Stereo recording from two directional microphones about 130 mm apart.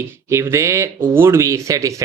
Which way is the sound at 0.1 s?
20° right (ahead or behind).